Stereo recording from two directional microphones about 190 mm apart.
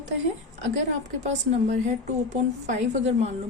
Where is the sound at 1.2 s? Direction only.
40° right (ahead or behind).